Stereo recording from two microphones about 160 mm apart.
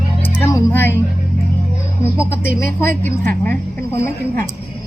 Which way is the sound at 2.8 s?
10° left (ahead or behind).